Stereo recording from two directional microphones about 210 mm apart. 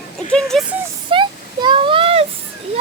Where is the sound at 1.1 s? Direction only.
25° right (ahead or behind).